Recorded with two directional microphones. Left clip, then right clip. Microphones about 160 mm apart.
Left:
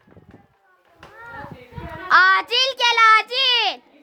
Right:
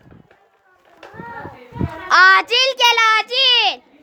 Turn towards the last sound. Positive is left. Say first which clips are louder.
# right 4 dB
turn(degrees=5)  # may be behind; listen again after turning